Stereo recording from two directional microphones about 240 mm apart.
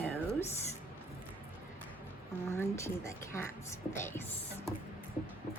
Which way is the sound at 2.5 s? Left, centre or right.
Centre.